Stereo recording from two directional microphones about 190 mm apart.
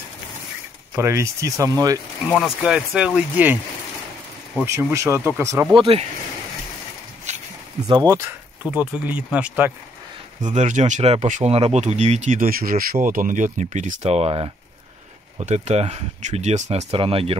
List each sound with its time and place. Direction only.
0.9 s speech: 15° right (ahead or behind)
2.2 s speech: centre (ahead or behind)
4.6 s speech: 15° right (ahead or behind)
5.8 s speech: 30° right (ahead or behind)
7.3 s a sound: 35° right (ahead or behind)
7.9 s speech: 20° right (ahead or behind)
10.5 s speech: 35° right (ahead or behind)